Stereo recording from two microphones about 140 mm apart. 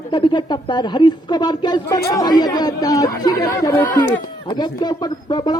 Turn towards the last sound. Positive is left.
turn(degrees=30)  # may be behind; listen again after turning